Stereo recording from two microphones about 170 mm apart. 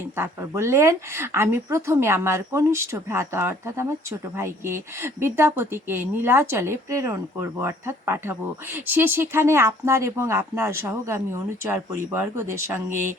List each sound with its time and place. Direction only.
0.2 s a woman's voice: 15° right (ahead or behind)